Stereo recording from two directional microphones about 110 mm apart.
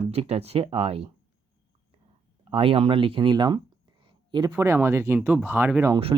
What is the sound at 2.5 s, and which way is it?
Speech, 55° right (ahead or behind).